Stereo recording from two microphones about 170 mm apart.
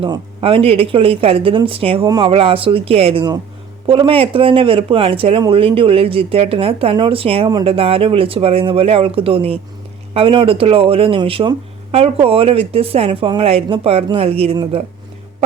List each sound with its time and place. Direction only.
0.0 s speech: 30° right (ahead or behind)